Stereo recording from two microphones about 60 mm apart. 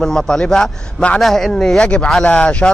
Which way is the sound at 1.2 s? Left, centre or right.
Centre.